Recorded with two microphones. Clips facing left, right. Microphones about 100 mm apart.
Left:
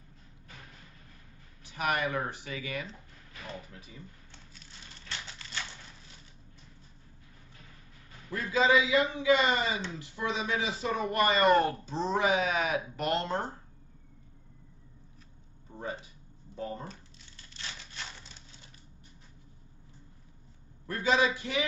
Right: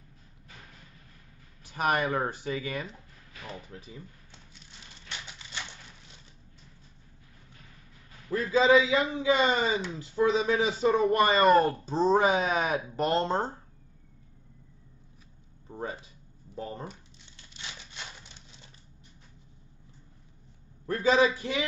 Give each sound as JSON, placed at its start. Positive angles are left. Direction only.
{"t": 1.7, "sound": "speech", "side_deg": -35}
{"t": 8.3, "sound": "speech", "side_deg": -35}
{"t": 15.7, "sound": "speech", "side_deg": -25}
{"t": 20.8, "sound": "a man's voice", "side_deg": -35}